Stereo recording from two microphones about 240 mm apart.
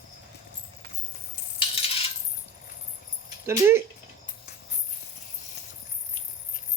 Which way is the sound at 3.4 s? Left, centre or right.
Centre.